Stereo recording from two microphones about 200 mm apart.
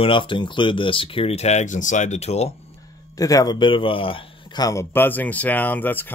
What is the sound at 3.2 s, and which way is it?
Speech, 15° left (ahead or behind).